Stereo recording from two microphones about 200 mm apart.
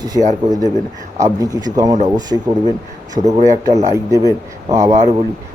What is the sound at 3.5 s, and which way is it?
Speech, 35° right (ahead or behind).